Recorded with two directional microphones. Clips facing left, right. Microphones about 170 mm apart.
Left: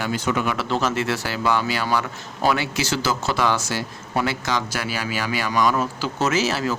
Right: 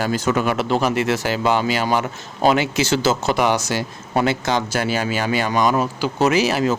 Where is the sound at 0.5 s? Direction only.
15° right (ahead or behind).